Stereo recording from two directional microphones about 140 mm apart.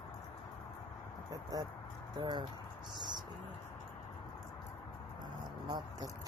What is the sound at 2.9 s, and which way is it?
Music, 30° right (ahead or behind).